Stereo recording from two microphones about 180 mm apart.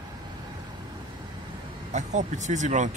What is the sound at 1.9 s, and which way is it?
Speech, 40° right (ahead or behind).